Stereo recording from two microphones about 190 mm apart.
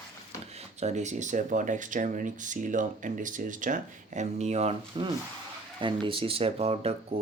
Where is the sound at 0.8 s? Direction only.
35° right (ahead or behind).